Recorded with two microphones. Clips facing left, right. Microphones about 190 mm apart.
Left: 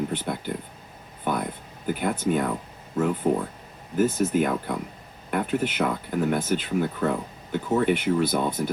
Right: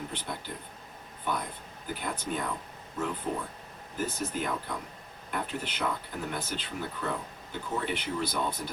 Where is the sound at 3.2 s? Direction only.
50° left (ahead or behind).